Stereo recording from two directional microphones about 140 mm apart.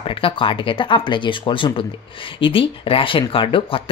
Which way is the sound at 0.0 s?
40° left (ahead or behind).